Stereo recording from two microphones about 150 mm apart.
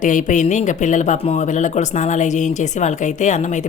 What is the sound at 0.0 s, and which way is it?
A woman's voice, 60° left (ahead or behind).